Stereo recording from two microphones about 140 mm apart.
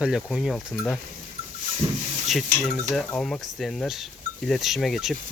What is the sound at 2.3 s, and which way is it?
Cutlery, centre (ahead or behind).